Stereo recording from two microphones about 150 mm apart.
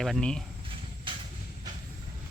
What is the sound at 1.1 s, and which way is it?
Train, 35° right (ahead or behind).